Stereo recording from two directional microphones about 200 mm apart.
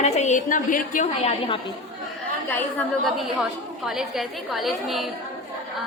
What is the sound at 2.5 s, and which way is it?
A woman's voice, 5° left (ahead or behind).